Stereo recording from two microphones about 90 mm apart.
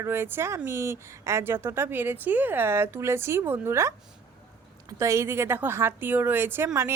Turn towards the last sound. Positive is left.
turn(degrees=-30)  # may be behind; listen again after turning